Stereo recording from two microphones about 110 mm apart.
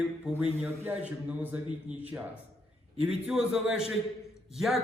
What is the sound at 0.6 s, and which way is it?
A man's voice, 20° right (ahead or behind).